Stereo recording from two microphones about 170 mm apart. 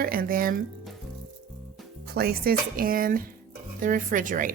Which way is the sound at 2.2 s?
65° right (ahead or behind).